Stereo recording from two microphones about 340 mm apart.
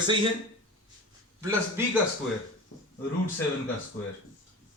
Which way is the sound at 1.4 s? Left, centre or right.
Centre.